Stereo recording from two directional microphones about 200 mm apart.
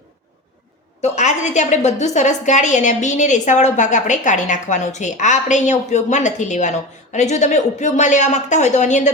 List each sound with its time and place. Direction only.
1.0 s a woman's voice: 35° left (ahead or behind)